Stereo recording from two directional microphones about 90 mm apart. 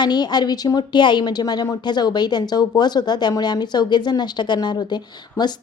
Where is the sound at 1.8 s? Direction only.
55° left (ahead or behind).